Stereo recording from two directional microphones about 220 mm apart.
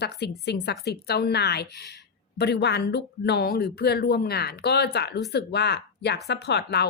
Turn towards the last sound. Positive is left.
turn(degrees=50)  # may be behind; listen again after turning